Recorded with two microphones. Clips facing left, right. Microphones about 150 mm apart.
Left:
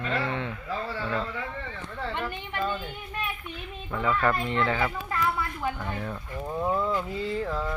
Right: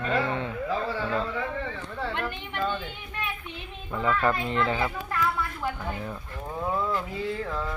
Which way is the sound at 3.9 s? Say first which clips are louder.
Right 1 dB; 5° right (ahead or behind).